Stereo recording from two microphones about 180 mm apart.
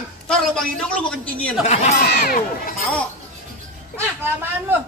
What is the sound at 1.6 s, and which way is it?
Speech, 40° left (ahead or behind).